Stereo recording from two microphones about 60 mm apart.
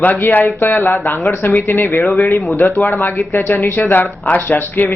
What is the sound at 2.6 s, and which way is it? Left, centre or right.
A man's voice, left.